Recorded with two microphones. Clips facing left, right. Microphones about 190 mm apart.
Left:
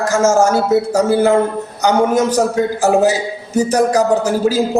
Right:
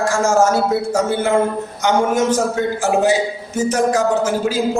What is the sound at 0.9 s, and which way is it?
A man's voice, 35° left (ahead or behind).